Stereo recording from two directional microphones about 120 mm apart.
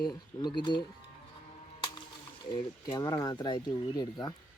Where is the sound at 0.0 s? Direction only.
35° left (ahead or behind).